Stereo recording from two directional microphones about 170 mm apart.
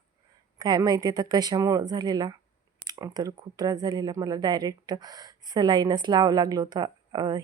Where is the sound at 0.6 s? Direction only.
25° right (ahead or behind).